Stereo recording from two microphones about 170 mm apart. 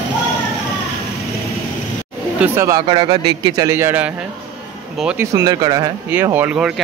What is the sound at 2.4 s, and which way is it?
Speech, 15° right (ahead or behind).